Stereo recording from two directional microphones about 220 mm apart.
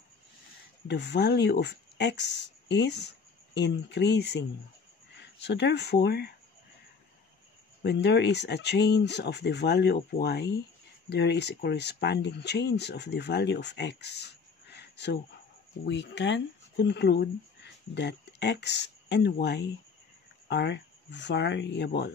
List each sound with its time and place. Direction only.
0.8 s speech: 50° left (ahead or behind)
7.8 s speech: 50° left (ahead or behind)